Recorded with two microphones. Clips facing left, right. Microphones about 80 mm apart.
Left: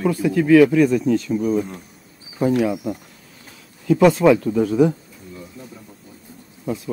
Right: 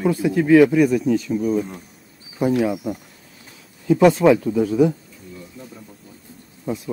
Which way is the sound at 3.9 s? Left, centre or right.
Right.